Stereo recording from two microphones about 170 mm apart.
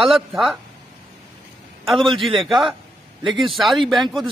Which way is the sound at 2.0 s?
30° right (ahead or behind).